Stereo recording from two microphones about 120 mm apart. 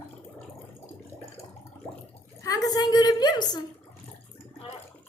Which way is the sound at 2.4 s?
30° left (ahead or behind).